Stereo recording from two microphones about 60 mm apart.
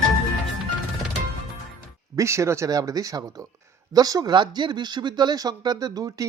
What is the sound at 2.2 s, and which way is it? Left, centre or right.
Speech, right.